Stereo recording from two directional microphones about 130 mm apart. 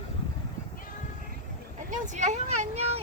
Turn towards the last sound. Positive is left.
turn(degrees=-50)  # may be behind; listen again after turning